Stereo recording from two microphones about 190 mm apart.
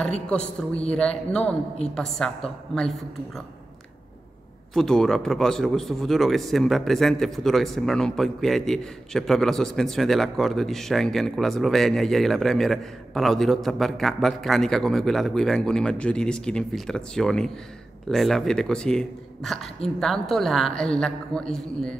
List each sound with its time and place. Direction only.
0.3 s a man's voice: 5° left (ahead or behind)
4.7 s a man's voice: centre (ahead or behind)